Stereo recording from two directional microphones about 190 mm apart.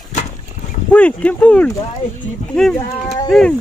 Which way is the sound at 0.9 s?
5° left (ahead or behind).